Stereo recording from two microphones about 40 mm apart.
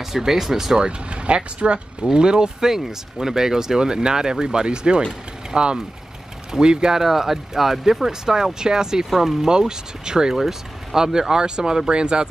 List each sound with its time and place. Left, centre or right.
0.0 s speech: centre
0.7 s speech: right